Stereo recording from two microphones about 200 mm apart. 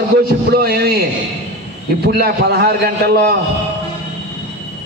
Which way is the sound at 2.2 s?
50° right (ahead or behind).